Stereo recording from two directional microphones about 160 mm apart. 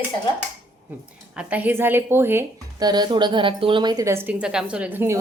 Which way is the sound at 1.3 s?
10° right (ahead or behind).